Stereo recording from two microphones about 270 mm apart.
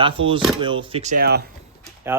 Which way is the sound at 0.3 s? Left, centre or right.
Centre.